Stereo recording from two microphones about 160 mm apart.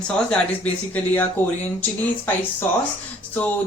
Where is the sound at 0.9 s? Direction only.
10° left (ahead or behind).